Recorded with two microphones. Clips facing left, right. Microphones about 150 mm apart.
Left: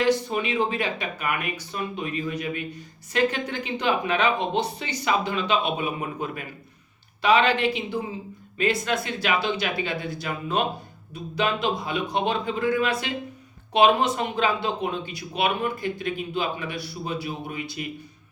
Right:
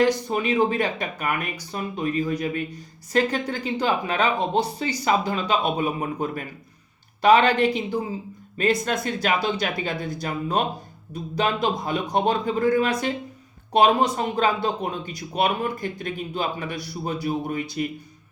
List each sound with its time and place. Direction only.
0.3 s speech: 40° right (ahead or behind)